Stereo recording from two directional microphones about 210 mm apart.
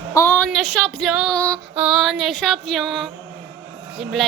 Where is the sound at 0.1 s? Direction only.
10° left (ahead or behind).